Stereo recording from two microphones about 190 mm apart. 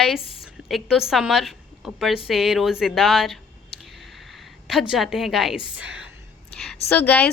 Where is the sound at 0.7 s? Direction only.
Centre (ahead or behind).